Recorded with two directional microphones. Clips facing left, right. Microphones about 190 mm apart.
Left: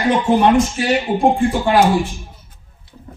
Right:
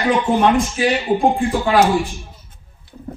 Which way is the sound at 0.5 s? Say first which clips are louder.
Left 2 dB; centre (ahead or behind).